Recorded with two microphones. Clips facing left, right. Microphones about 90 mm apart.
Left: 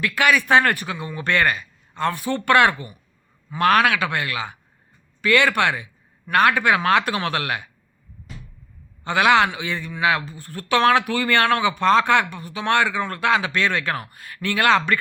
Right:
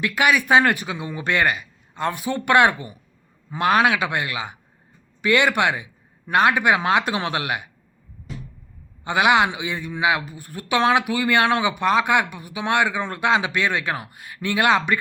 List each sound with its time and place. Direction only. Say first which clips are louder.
0.0 s a man's voice: even; 20° right (ahead or behind)
9.0 s a man's voice: left 1 dB; 15° right (ahead or behind)